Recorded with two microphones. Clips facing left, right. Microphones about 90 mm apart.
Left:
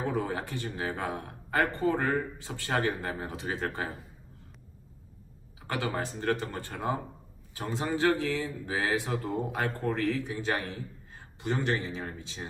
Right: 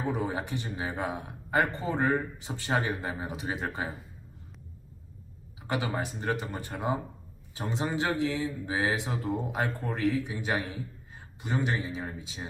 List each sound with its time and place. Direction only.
0.1 s speech: 20° right (ahead or behind)
5.6 s speech: 15° right (ahead or behind)